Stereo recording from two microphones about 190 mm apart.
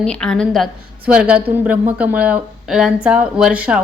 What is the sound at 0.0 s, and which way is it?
A woman's voice, 5° left (ahead or behind).